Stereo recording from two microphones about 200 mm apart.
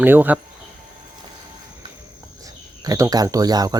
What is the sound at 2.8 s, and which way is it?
Speech, 20° right (ahead or behind).